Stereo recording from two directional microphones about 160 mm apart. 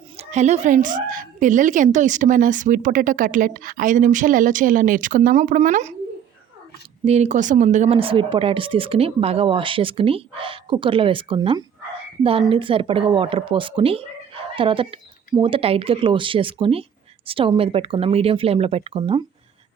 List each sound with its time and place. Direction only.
0.2 s a woman's voice: 45° right (ahead or behind)
7.0 s speech: 45° right (ahead or behind)